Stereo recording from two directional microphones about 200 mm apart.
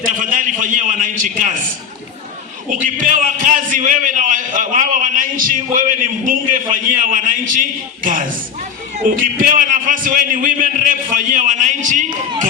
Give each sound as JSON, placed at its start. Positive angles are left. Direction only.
{"t": 0.0, "sound": "a man's voice", "side_deg": -40}
{"t": 2.8, "sound": "a man's voice", "side_deg": -40}